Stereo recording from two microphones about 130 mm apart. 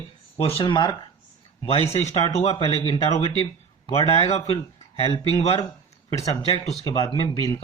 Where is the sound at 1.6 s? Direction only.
50° left (ahead or behind).